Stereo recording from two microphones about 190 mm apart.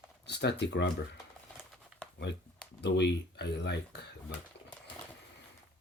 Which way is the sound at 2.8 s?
65° left (ahead or behind).